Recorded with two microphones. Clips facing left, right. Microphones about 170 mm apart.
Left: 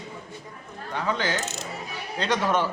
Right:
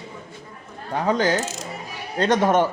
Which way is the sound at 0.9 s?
40° right (ahead or behind).